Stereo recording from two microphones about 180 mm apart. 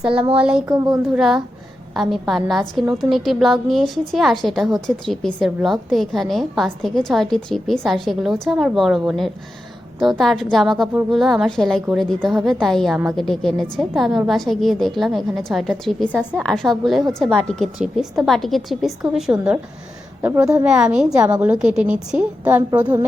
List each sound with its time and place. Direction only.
0.3 s a woman's voice: 5° right (ahead or behind)
0.6 s speech: 20° right (ahead or behind)
1.1 s a woman's voice: centre (ahead or behind)
20.2 s a woman's voice: 15° right (ahead or behind)
20.7 s a woman's voice: 5° right (ahead or behind)